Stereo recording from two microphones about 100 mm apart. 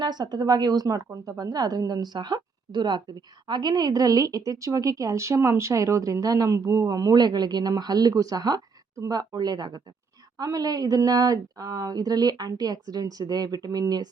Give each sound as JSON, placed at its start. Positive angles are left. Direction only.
{"t": 0.0, "sound": "a woman's voice", "side_deg": -45}